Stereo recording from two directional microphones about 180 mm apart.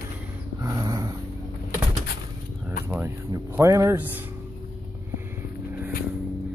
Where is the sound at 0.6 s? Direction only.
20° right (ahead or behind).